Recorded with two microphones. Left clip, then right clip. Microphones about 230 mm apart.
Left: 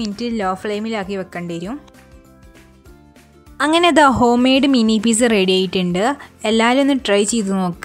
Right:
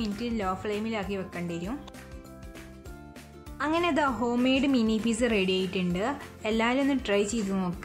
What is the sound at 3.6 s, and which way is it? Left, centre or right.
A woman's voice, left.